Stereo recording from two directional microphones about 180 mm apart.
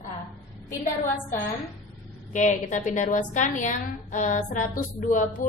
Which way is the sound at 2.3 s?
45° left (ahead or behind).